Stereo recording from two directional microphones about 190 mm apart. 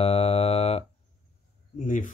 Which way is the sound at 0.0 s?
30° left (ahead or behind).